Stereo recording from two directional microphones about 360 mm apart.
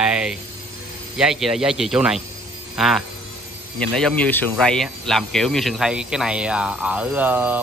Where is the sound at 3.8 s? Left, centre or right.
Centre.